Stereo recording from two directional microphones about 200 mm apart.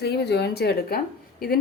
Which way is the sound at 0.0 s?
55° left (ahead or behind).